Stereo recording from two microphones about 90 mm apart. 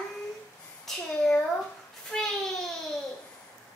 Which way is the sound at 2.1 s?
5° left (ahead or behind).